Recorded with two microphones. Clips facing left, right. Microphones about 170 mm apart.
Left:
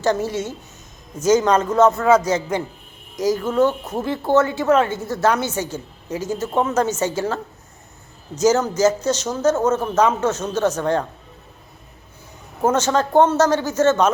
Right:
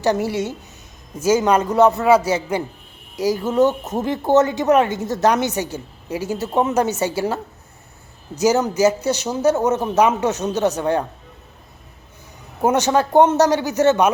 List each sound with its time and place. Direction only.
0.0 s speech: 15° right (ahead or behind)
8.4 s speech: 15° right (ahead or behind)
12.6 s speech: 15° right (ahead or behind)